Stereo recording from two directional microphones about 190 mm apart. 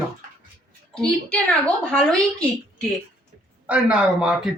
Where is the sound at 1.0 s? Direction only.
5° left (ahead or behind).